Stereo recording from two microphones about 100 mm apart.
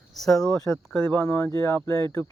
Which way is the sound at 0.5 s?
30° left (ahead or behind).